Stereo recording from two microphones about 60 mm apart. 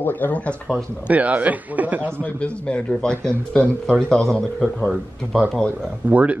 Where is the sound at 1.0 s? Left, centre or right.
Right.